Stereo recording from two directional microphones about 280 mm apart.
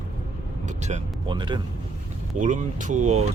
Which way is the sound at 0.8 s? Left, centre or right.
Right.